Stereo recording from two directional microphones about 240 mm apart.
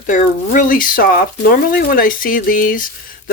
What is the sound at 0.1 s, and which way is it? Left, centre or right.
Speech, left.